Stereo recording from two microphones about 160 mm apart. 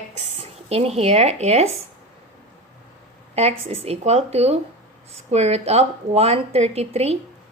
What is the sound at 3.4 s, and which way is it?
A woman's voice, 40° right (ahead or behind).